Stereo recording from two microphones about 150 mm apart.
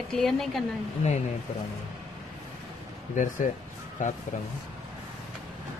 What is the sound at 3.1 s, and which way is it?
Speech, 55° left (ahead or behind).